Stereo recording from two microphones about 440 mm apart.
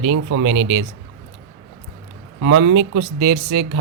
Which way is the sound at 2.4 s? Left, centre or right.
Right.